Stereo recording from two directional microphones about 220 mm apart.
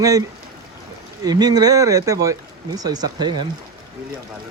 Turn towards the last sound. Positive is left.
turn(degrees=-20)  # may be behind; listen again after turning